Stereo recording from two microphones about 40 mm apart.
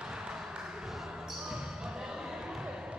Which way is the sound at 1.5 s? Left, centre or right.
Centre.